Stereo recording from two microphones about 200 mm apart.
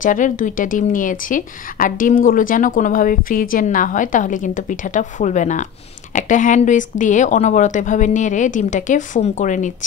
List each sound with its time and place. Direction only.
0.0 s a woman's voice: 40° left (ahead or behind)